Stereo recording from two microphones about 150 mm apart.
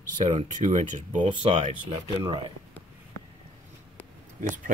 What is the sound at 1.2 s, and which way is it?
Speech, 40° right (ahead or behind).